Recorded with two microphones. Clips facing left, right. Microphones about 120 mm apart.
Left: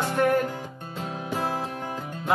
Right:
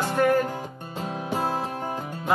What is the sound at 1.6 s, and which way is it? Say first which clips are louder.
Music: right 2 dB; 40° right (ahead or behind).